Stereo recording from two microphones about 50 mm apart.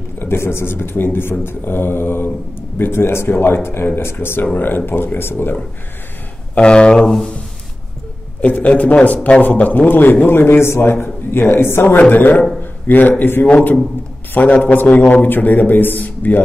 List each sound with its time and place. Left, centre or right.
0.2 s speech: left
6.5 s speech: centre
8.4 s a man's voice: left
14.6 s speech: left